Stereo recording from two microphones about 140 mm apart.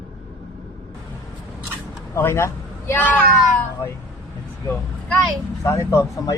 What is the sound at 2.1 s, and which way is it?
Speech, 15° left (ahead or behind).